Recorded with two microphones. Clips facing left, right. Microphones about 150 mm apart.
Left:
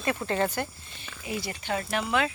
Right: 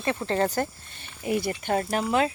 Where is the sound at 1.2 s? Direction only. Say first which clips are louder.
Right 7 dB; 50° right (ahead or behind).